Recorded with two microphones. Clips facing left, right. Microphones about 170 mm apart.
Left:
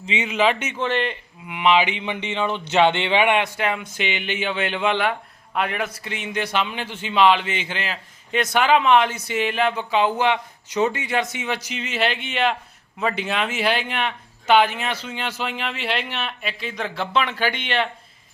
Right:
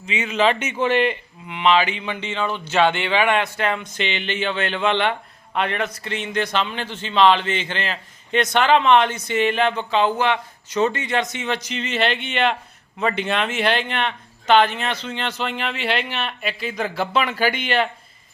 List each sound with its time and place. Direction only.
0.0 s speech: 20° left (ahead or behind)
0.3 s speech: 5° left (ahead or behind)
1.5 s a man's voice: 10° left (ahead or behind)